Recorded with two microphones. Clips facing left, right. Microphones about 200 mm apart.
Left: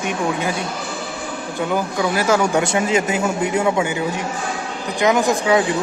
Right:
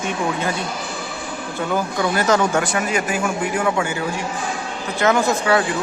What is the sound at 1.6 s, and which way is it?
Speech, 15° left (ahead or behind).